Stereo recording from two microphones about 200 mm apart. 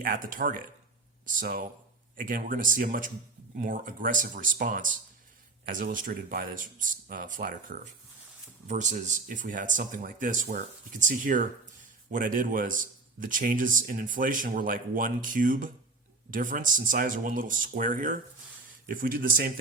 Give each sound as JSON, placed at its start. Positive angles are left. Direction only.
{"t": 0.0, "sound": "a man's voice", "side_deg": -45}